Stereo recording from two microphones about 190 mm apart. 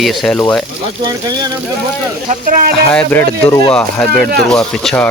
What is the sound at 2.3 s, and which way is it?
Speech, 45° right (ahead or behind).